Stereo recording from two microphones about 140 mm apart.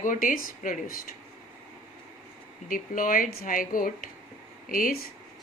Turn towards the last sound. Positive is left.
turn(degrees=85)